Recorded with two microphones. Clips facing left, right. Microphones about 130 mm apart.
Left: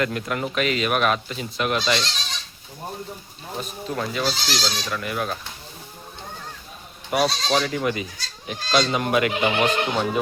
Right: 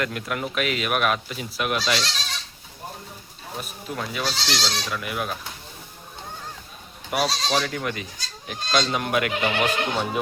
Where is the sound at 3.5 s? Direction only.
5° right (ahead or behind).